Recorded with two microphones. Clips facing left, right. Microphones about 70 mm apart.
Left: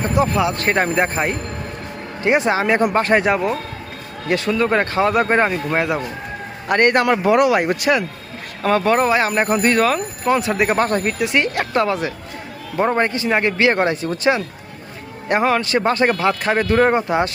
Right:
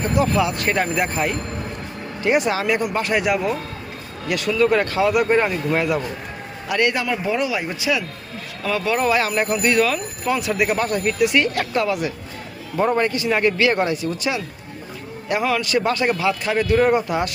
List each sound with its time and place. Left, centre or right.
0.0 s speech: left
0.5 s speech: left
6.7 s a man's voice: left
7.0 s speech: left
9.0 s speech: left
11.2 s speech: left